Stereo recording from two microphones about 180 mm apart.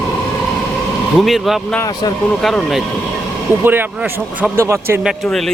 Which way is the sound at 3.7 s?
10° right (ahead or behind).